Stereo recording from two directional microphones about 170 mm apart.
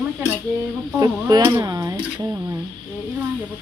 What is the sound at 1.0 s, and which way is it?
Speech, 20° right (ahead or behind).